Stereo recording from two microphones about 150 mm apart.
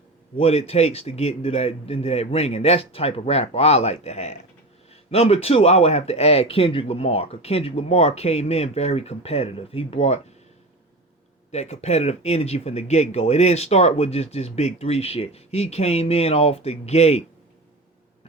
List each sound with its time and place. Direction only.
0.3 s speech: 40° left (ahead or behind)
11.5 s speech: 45° left (ahead or behind)